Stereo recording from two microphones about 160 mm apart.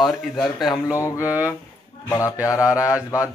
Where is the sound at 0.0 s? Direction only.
Centre (ahead or behind).